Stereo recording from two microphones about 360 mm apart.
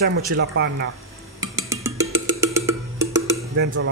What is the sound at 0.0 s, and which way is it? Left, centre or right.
Speech, right.